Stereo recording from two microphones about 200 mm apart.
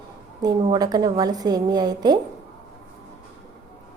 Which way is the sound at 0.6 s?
20° right (ahead or behind).